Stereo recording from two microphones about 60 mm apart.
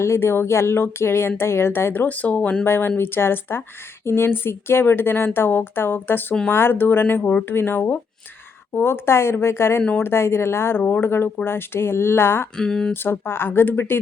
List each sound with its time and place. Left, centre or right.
0.0 s speech: left
2.0 s speech: left
2.6 s a woman's voice: left
12.5 s speech: centre
12.9 s speech: left